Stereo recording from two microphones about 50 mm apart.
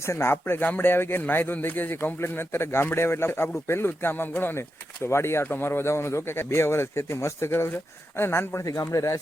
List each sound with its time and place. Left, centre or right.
0.0 s speech: left
0.4 s speech: left
2.2 s speech: left
5.0 s speech: left
5.5 s speech: left
8.9 s speech: left